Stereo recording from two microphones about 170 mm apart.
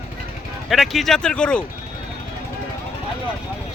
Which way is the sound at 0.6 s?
Centre (ahead or behind).